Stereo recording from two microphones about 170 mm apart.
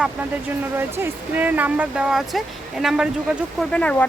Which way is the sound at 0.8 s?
10° right (ahead or behind).